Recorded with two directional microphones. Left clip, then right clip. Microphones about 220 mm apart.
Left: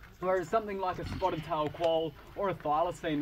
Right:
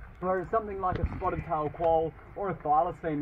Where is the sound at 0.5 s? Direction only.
45° left (ahead or behind).